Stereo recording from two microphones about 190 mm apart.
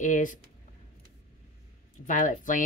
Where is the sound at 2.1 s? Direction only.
45° left (ahead or behind).